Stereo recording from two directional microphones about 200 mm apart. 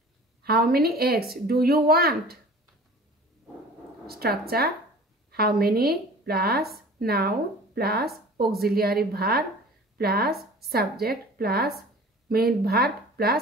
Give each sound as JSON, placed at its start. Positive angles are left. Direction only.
{"t": 0.4, "sound": "speech", "side_deg": -50}
{"t": 4.1, "sound": "speech", "side_deg": -50}